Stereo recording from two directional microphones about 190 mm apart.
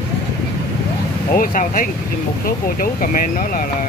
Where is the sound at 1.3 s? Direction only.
45° left (ahead or behind).